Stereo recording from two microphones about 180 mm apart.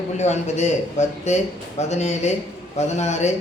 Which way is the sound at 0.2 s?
40° left (ahead or behind).